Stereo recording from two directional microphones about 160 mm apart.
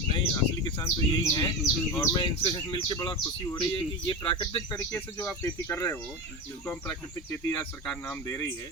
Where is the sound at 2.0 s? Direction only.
30° left (ahead or behind).